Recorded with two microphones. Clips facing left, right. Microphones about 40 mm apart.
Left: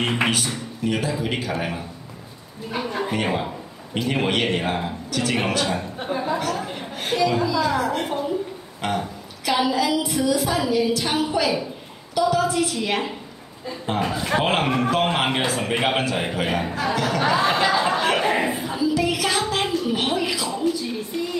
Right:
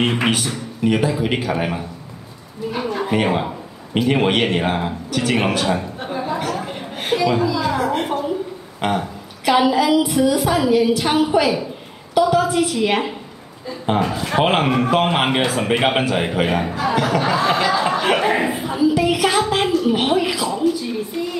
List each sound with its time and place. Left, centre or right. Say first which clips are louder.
0.0 s a woman's voice: right 3 dB; centre
0.8 s a woman's voice: right 6 dB; centre
2.7 s a sound: right 2 dB; centre
3.1 s a woman's voice: right 5 dB; centre
6.4 s a sound: right 2 dB; centre
8.8 s a woman's voice: right 4 dB; right
14.0 s a man's voice: even; centre
16.9 s a woman's voice: right 5 dB; centre
17.2 s crowd: right 2 dB; centre
18.0 s a sound: right 3 dB; centre